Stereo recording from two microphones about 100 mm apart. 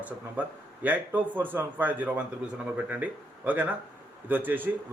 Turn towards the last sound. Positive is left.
turn(degrees=-20)  # may be behind; listen again after turning